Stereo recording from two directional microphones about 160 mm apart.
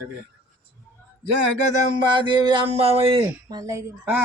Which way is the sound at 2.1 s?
30° right (ahead or behind).